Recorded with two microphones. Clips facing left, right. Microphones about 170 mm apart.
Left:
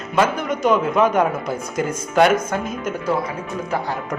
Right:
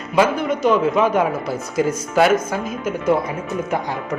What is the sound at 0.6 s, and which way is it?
Speech, centre (ahead or behind).